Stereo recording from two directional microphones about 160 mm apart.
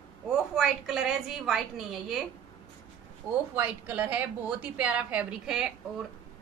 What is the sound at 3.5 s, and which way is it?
A woman's voice, 10° right (ahead or behind).